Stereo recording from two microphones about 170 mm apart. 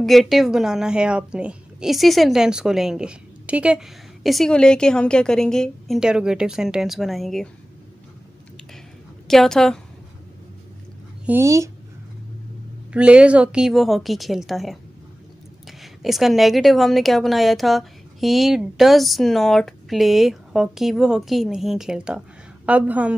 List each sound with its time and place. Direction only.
0.0 s a woman's voice: centre (ahead or behind)
9.3 s a woman's voice: 5° left (ahead or behind)
11.2 s a woman's voice: 15° right (ahead or behind)
12.9 s a woman's voice: 5° right (ahead or behind)